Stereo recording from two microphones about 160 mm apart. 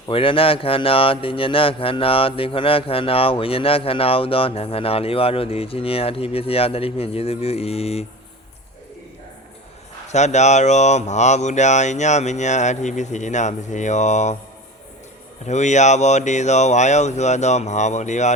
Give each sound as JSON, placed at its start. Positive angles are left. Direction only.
{"t": 0.1, "sound": "speech", "side_deg": 35}
{"t": 10.1, "sound": "speech", "side_deg": 45}
{"t": 15.4, "sound": "speech", "side_deg": 45}